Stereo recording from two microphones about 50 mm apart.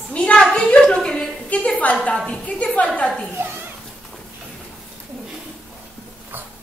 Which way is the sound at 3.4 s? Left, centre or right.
Right.